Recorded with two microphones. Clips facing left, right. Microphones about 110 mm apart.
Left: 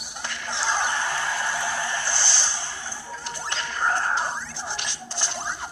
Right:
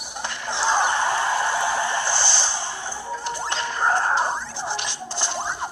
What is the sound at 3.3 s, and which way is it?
Music, 25° right (ahead or behind).